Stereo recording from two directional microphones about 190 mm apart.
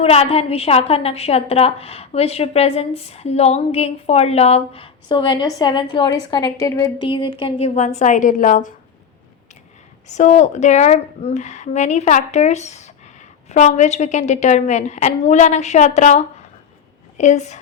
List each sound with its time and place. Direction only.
0.0 s a woman's voice: 35° left (ahead or behind)
10.1 s a woman's voice: 40° left (ahead or behind)